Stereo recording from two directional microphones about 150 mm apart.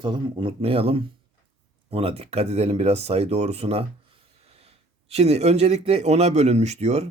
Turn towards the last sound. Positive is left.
turn(degrees=-45)  # may be behind; listen again after turning